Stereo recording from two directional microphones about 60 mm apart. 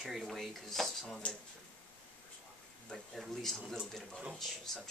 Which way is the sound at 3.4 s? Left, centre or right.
Centre.